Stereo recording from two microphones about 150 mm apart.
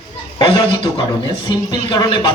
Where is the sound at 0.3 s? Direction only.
30° left (ahead or behind).